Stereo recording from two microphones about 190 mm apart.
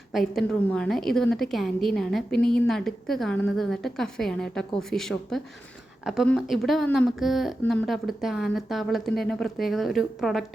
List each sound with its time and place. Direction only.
0.1 s a woman's voice: centre (ahead or behind)